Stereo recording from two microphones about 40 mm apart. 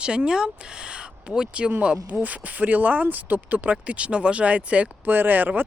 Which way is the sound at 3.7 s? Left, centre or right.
Right.